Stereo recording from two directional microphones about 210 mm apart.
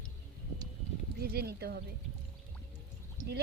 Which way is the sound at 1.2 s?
50° right (ahead or behind).